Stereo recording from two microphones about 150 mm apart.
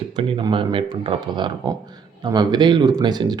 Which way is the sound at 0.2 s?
35° right (ahead or behind).